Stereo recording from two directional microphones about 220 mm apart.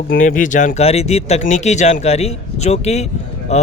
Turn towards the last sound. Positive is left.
turn(degrees=30)  # may be behind; listen again after turning